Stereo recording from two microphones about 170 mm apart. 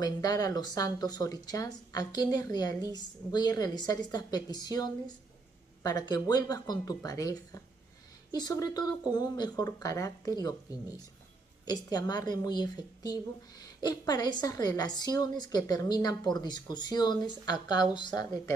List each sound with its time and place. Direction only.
0.0 s speech: 20° left (ahead or behind)
11.7 s speech: 20° left (ahead or behind)